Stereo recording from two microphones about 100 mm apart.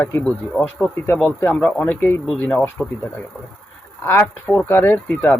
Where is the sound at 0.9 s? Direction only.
20° left (ahead or behind).